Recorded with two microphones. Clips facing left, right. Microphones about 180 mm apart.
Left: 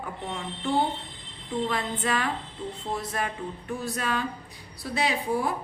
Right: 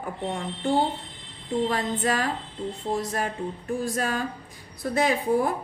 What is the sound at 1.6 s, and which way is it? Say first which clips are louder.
A woman's voice: right 3 dB; 40° right (ahead or behind).